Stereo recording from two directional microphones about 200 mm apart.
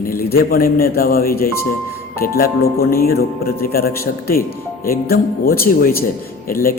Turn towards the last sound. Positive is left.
turn(degrees=45)  # may be behind; listen again after turning